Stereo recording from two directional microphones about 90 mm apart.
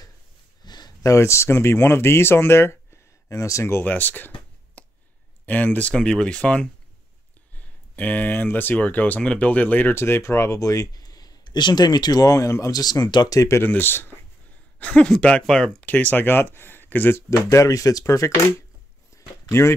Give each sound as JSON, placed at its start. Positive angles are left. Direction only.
{"t": 0.7, "sound": "a sound", "side_deg": 50}
{"t": 1.1, "sound": "speech", "side_deg": 30}
{"t": 4.8, "sound": "a sound", "side_deg": 15}
{"t": 5.4, "sound": "speech", "side_deg": 20}
{"t": 12.8, "sound": "speech", "side_deg": 45}
{"t": 13.7, "sound": "speech", "side_deg": 25}
{"t": 14.8, "sound": "speech", "side_deg": 10}
{"t": 17.5, "sound": "speech", "side_deg": 35}
{"t": 19.1, "sound": "a sound", "side_deg": 30}